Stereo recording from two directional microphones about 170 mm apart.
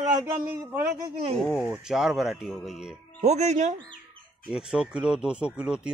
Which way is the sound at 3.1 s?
45° right (ahead or behind).